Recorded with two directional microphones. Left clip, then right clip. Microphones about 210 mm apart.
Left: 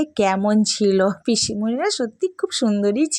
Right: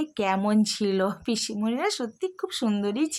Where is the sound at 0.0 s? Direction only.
25° left (ahead or behind).